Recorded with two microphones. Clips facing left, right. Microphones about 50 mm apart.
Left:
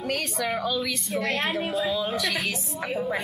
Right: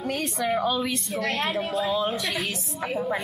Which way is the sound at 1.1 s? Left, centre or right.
Centre.